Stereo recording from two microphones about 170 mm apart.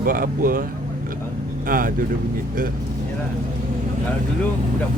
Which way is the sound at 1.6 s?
55° right (ahead or behind).